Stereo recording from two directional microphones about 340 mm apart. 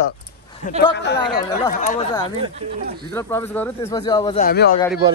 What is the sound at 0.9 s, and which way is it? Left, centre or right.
Speech, left.